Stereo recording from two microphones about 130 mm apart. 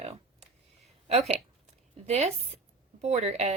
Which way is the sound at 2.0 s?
50° right (ahead or behind).